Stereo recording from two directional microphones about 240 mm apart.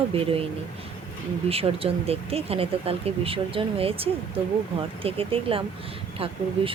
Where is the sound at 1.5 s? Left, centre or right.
Right.